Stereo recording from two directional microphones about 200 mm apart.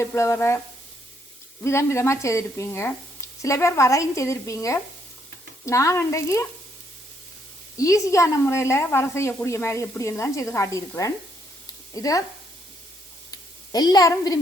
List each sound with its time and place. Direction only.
0.0 s speech: 15° left (ahead or behind)
1.6 s speech: 15° left (ahead or behind)
7.8 s speech: 15° left (ahead or behind)
11.6 s a sound: 15° left (ahead or behind)
13.3 s a woman's voice: 20° left (ahead or behind)